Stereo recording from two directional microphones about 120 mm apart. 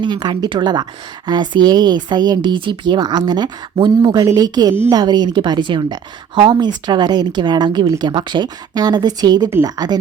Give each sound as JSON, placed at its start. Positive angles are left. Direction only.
{"t": 0.0, "sound": "speech", "side_deg": -40}